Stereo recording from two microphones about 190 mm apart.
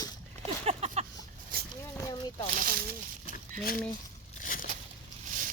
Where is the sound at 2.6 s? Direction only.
50° right (ahead or behind).